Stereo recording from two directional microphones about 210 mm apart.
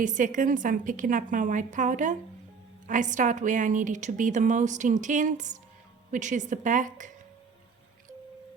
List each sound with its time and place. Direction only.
0.0 s a woman's voice: 35° right (ahead or behind)